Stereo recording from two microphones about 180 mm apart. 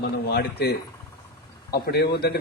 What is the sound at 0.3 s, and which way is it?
A man's voice, 65° left (ahead or behind).